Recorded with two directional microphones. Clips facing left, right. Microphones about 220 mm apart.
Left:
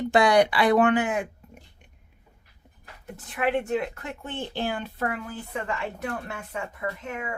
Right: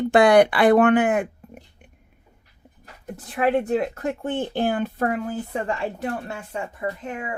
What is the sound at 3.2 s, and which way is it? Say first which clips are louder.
Speech: right 5 dB; 40° right (ahead or behind).